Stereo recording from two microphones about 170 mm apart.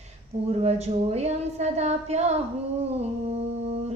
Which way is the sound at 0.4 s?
35° right (ahead or behind).